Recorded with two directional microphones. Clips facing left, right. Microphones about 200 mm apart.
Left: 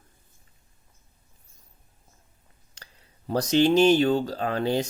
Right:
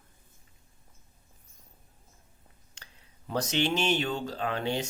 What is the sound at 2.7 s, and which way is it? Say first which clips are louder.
Speech: left 5 dB; 35° left (ahead or behind).